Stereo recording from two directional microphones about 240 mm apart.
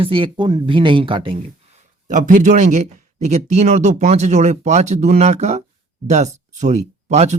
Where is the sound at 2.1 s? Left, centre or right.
Right.